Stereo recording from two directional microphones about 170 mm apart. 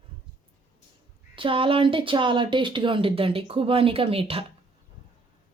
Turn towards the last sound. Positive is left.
turn(degrees=-35)  # may be behind; listen again after turning